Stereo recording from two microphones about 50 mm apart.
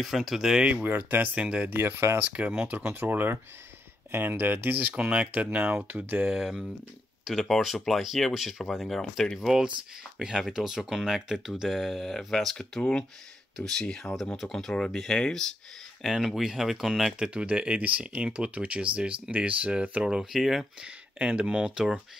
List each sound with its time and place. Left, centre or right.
0.0 s speech: centre
0.8 s speech: right
1.7 s speech: right
2.4 s speech: right
2.9 s speech: right
6.3 s speech: centre
10.1 s speech: centre
12.5 s speech: centre
16.0 s speech: centre
17.3 s speech: right
20.3 s speech: centre
20.8 s speech: right